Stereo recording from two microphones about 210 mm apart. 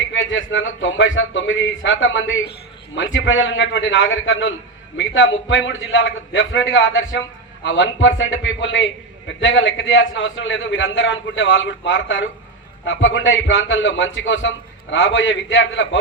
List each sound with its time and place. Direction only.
0.0 s a man's voice: 65° left (ahead or behind)